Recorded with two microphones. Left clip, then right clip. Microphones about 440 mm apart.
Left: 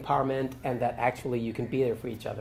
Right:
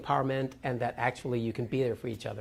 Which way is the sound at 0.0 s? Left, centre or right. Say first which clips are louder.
Left 2 dB; right.